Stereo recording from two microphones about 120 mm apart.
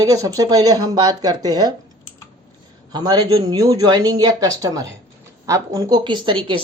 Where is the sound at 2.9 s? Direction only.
35° right (ahead or behind).